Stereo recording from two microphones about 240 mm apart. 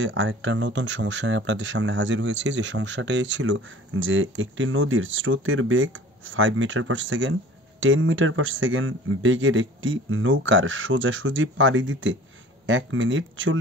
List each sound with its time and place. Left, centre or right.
0.0 s speech: right